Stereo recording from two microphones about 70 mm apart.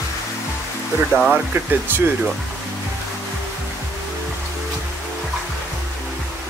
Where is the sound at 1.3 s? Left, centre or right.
Right.